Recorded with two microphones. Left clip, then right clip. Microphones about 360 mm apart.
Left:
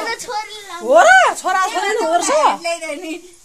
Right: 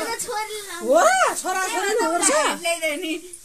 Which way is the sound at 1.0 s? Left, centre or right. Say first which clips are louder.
Left 9 dB; left.